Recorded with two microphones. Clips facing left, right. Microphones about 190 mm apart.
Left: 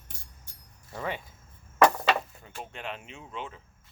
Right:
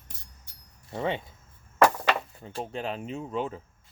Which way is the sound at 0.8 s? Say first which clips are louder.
Right 5 dB; 25° right (ahead or behind).